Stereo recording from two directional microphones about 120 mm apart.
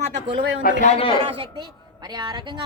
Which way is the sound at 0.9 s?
45° left (ahead or behind).